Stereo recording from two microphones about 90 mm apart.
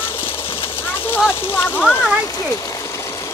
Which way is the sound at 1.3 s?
20° left (ahead or behind).